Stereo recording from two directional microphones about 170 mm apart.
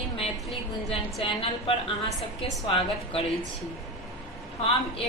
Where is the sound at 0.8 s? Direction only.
35° left (ahead or behind).